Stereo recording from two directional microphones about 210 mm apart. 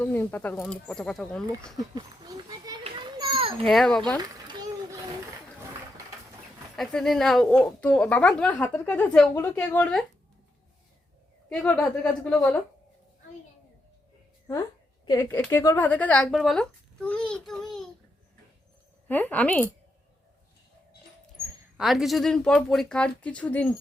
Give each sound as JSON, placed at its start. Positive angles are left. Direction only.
{"t": 0.0, "sound": "speech", "side_deg": 10}
{"t": 2.0, "sound": "children playing", "side_deg": -20}
{"t": 3.7, "sound": "speech", "side_deg": 0}
{"t": 4.4, "sound": "splash", "side_deg": -20}
{"t": 6.7, "sound": "speech", "side_deg": 0}
{"t": 11.4, "sound": "a woman's voice", "side_deg": 5}
{"t": 15.0, "sound": "speech", "side_deg": 15}
{"t": 19.0, "sound": "a woman's voice", "side_deg": 10}
{"t": 21.8, "sound": "speech", "side_deg": 0}